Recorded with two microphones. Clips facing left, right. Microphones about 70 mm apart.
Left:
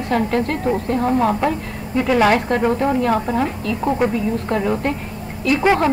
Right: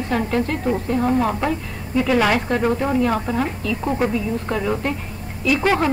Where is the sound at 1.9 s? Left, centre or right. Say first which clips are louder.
Left 2 dB; left.